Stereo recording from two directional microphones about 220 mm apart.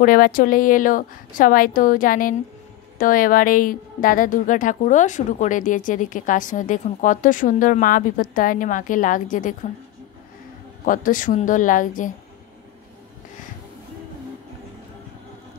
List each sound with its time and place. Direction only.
0.0 s a woman's voice: 40° left (ahead or behind)
10.9 s a woman's voice: 40° left (ahead or behind)